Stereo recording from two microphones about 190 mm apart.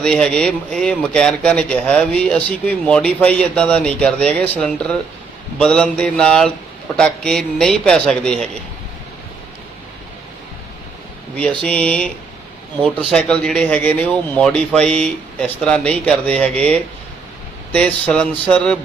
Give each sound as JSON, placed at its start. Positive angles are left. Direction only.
{"t": 0.0, "sound": "speech", "side_deg": 5}
{"t": 11.3, "sound": "speech", "side_deg": 5}